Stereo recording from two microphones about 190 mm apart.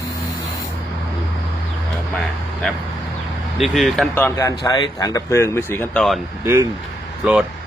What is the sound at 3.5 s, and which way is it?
Speech, centre (ahead or behind).